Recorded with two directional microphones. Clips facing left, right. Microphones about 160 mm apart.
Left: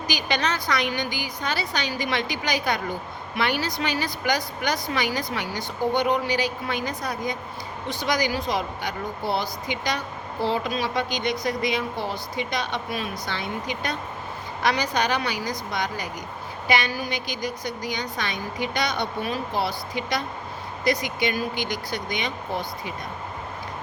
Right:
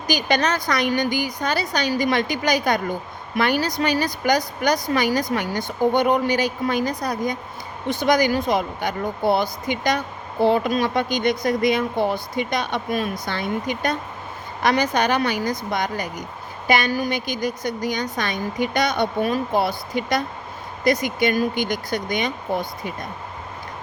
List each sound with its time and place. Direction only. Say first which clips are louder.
0.1 s a woman's voice: right 6 dB; 45° right (ahead or behind)
7.9 s a woman's voice: right 7 dB; 50° right (ahead or behind)